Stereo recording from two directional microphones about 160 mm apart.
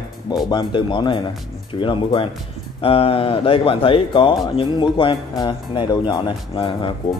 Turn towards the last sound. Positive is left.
turn(degrees=30)  # may be behind; listen again after turning